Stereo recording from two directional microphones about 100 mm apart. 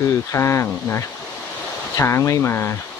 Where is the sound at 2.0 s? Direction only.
25° left (ahead or behind).